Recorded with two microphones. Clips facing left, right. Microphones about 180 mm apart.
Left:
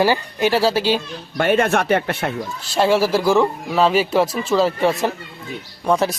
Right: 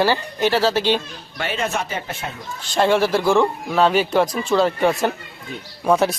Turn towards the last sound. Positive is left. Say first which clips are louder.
# right 1 dB
turn(degrees=0)  # may be behind; listen again after turning